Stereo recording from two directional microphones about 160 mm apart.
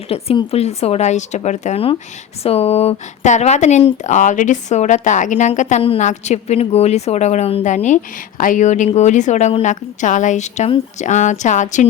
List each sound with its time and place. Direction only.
0.1 s a woman's voice: 40° left (ahead or behind)